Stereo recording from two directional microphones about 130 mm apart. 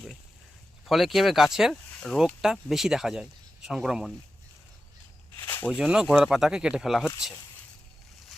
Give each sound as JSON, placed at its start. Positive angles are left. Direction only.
{"t": 0.9, "sound": "speech", "side_deg": 0}
{"t": 5.4, "sound": "a sound", "side_deg": 20}
{"t": 5.6, "sound": "speech", "side_deg": -5}